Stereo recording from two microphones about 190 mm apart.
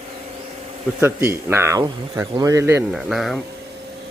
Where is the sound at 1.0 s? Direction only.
15° right (ahead or behind).